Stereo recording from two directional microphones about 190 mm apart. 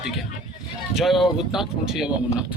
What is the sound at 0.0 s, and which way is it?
Speech, centre (ahead or behind).